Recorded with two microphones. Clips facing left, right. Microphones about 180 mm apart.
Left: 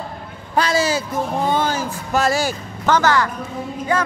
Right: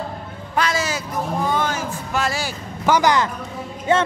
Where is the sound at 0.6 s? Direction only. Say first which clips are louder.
Left 4 dB; 30° left (ahead or behind).